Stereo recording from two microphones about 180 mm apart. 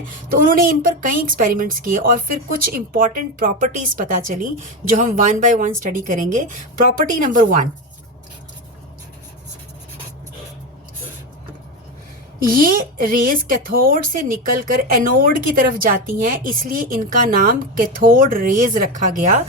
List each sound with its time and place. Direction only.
0.3 s speech: 50° right (ahead or behind)
12.4 s speech: 50° right (ahead or behind)